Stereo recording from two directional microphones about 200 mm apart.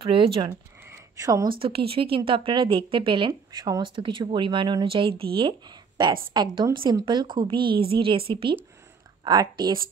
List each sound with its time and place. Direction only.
0.0 s speech: 25° right (ahead or behind)
0.8 s a sound: 15° right (ahead or behind)
1.9 s speech: 25° right (ahead or behind)